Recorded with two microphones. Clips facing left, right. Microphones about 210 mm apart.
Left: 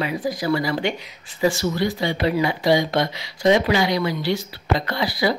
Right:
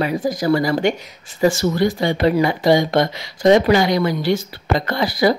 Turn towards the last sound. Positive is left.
turn(degrees=-45)  # may be behind; listen again after turning